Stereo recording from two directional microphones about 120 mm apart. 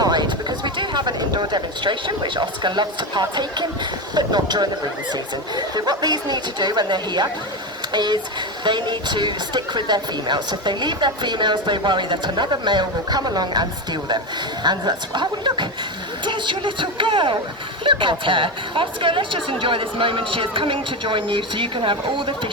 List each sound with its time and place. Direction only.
0.0 s a woman's voice: 35° right (ahead or behind)